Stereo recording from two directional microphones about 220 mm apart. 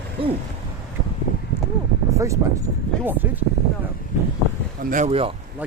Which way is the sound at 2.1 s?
15° right (ahead or behind).